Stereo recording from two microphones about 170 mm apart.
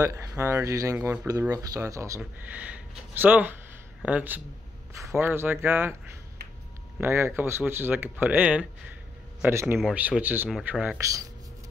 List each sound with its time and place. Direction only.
0.0 s speech: 20° right (ahead or behind)
0.9 s speech: 5° right (ahead or behind)
1.5 s speech: 20° right (ahead or behind)
7.0 s speech: 15° right (ahead or behind)